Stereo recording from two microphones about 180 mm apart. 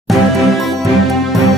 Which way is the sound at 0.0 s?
Centre (ahead or behind).